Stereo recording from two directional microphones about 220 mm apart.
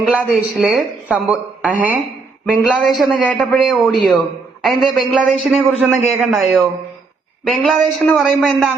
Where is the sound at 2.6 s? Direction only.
5° left (ahead or behind).